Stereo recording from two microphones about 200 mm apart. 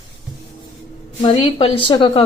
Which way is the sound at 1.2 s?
25° left (ahead or behind).